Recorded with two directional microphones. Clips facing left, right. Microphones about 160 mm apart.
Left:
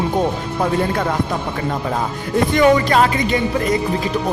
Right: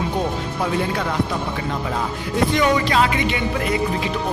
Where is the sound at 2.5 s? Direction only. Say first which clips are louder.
Left 6 dB; 50° left (ahead or behind).